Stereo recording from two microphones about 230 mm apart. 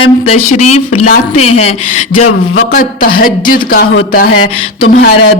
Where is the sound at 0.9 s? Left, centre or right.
Left.